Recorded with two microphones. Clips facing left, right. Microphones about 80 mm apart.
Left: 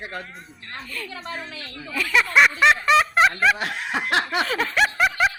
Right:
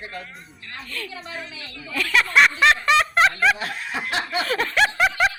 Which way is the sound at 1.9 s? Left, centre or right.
Centre.